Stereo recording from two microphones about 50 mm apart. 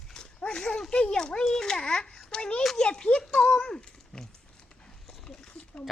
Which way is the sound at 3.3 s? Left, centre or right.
Centre.